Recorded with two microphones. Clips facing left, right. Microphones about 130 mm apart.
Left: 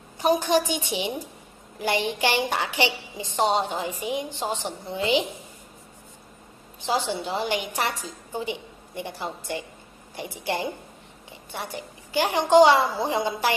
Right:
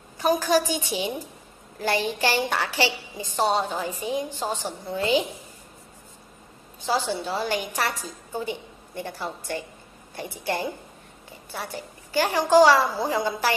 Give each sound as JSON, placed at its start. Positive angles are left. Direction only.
{"t": 0.2, "sound": "a woman's voice", "side_deg": 20}
{"t": 6.9, "sound": "a woman's voice", "side_deg": 15}